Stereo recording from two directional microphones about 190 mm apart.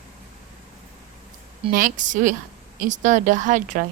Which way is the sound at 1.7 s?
45° right (ahead or behind).